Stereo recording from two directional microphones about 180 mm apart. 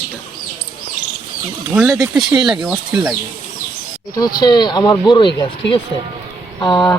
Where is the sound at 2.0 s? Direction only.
15° right (ahead or behind).